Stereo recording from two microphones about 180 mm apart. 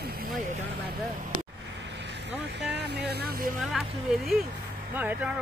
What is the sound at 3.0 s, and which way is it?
Vehicle, 65° right (ahead or behind).